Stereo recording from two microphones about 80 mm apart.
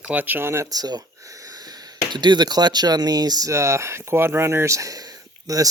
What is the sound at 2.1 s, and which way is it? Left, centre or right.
Speech, right.